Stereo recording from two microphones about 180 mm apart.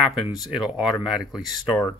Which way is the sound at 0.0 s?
Centre (ahead or behind).